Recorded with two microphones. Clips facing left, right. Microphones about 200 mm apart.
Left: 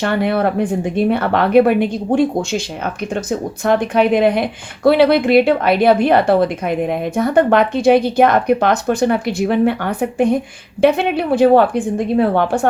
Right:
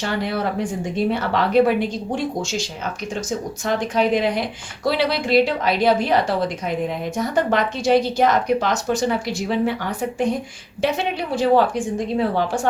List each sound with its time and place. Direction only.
0.0 s a woman's voice: 55° left (ahead or behind)
3.7 s a woman's voice: 60° left (ahead or behind)